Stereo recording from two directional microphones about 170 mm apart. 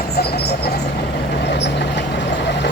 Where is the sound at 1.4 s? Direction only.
90° left.